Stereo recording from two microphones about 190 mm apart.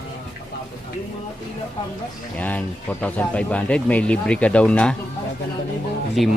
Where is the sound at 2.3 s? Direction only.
10° left (ahead or behind).